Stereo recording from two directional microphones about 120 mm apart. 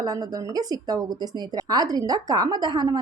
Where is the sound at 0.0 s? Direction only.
30° right (ahead or behind).